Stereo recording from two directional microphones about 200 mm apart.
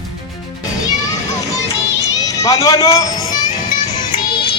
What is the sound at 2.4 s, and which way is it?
Speech, 15° left (ahead or behind).